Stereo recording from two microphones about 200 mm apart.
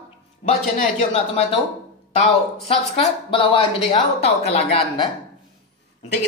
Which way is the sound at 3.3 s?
25° left (ahead or behind).